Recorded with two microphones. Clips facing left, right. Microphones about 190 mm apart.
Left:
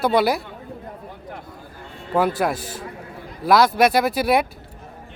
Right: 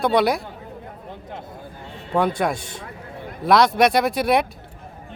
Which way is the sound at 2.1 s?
5° left (ahead or behind).